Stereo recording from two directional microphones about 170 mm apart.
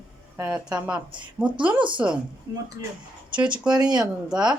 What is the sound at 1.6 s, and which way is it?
Speech, 30° right (ahead or behind).